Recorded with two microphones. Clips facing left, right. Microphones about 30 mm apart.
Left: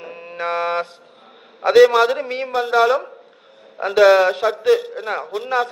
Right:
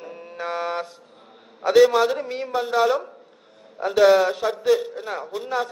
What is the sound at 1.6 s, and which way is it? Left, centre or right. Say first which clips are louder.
Speech: left 4 dB; left.